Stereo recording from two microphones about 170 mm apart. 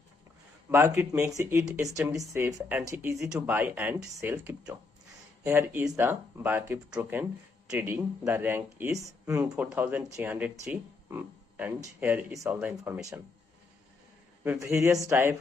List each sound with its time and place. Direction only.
0.7 s speech: 15° right (ahead or behind)
14.4 s speech: 10° right (ahead or behind)